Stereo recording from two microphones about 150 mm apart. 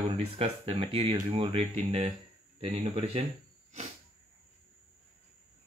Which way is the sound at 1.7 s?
50° right (ahead or behind).